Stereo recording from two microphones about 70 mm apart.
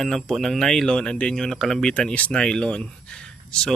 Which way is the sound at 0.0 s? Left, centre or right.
Centre.